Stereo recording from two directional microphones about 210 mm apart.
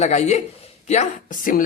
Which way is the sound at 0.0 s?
30° left (ahead or behind).